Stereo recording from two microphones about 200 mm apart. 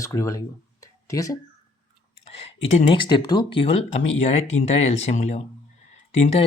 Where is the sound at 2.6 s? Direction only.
30° left (ahead or behind).